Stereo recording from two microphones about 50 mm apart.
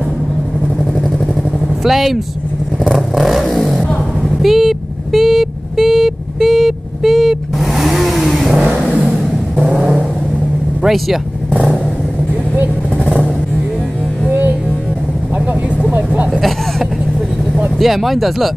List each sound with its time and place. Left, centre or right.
1.9 s speech: centre
2.9 s vehicle: centre
9.0 s music: centre
10.8 s speech: centre
13.0 s vehicle: right
17.7 s speech: centre